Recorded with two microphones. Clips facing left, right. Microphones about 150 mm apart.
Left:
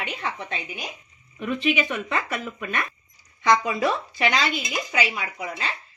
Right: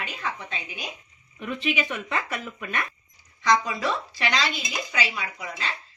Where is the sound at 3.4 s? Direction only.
55° left (ahead or behind).